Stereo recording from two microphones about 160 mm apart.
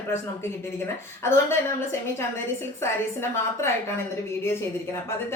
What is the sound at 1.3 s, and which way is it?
A woman's voice, 15° left (ahead or behind).